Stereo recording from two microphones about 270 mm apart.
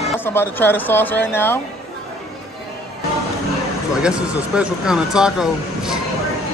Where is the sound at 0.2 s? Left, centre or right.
Centre.